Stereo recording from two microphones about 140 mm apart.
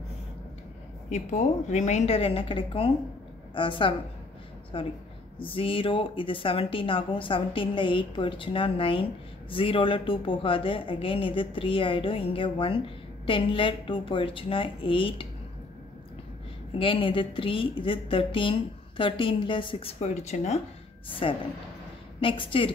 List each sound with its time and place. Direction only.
1.1 s a woman's voice: 60° left (ahead or behind); by 15.2 s 40° left (ahead or behind)
16.7 s speech: 40° left (ahead or behind)
21.2 s speech: 40° left (ahead or behind)